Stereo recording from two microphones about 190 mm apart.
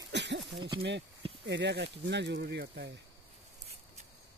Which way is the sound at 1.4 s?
65° right (ahead or behind).